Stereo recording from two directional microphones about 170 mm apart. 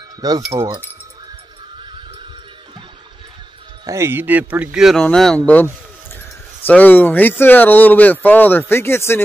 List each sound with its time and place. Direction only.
0.5 s speech: 15° right (ahead or behind)
3.8 s speech: 15° right (ahead or behind); by 9.2 s 15° left (ahead or behind)